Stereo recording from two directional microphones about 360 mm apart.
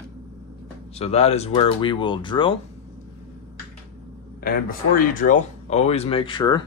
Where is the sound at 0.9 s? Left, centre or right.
Centre.